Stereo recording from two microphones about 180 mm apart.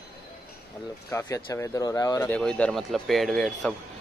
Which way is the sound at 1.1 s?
15° left (ahead or behind).